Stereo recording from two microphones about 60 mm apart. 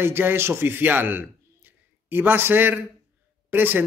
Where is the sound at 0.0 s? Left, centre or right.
Right.